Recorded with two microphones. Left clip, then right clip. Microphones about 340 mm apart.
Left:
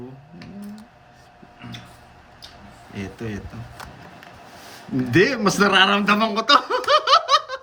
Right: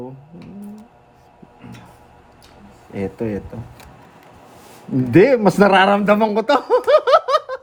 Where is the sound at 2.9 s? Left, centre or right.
Centre.